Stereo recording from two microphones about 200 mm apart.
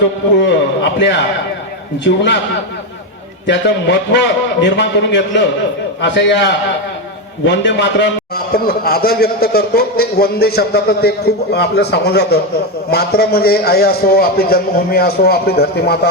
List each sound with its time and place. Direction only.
0.3 s a man's voice: 60° left (ahead or behind)
3.4 s a man's voice: 60° left (ahead or behind)
8.5 s a man's voice: 50° left (ahead or behind)